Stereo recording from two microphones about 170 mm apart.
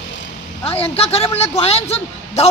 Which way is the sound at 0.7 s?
35° left (ahead or behind).